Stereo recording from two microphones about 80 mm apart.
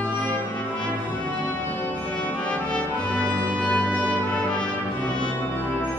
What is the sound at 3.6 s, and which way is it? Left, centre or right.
Music, centre.